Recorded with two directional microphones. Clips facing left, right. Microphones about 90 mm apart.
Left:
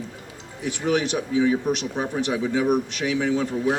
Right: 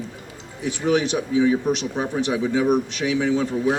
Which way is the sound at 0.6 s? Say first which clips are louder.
Right 2 dB; 25° right (ahead or behind).